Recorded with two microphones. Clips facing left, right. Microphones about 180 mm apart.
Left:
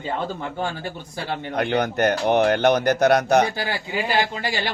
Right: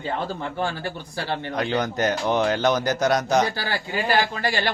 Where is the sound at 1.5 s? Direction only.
60° left (ahead or behind).